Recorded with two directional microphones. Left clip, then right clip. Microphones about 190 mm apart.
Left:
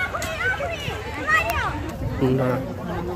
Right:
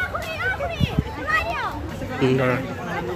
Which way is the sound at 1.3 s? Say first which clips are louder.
Left 2 dB; 45° left (ahead or behind).